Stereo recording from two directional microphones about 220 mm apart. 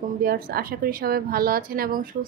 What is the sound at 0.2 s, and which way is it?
A woman's voice, 45° right (ahead or behind).